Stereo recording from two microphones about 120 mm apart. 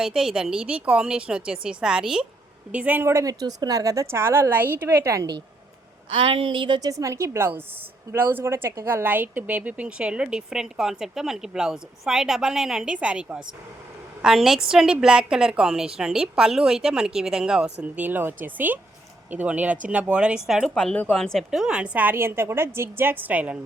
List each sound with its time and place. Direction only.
0.0 s a woman's voice: 5° right (ahead or behind); by 5.4 s 30° right (ahead or behind)
6.2 s a woman's voice: 45° right (ahead or behind); by 23.6 s 10° right (ahead or behind)